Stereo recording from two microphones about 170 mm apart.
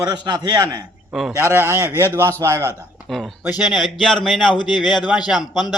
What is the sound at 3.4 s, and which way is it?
A man's voice, 5° right (ahead or behind).